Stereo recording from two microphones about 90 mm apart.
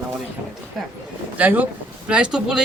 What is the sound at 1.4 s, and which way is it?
A woman's voice, 20° right (ahead or behind).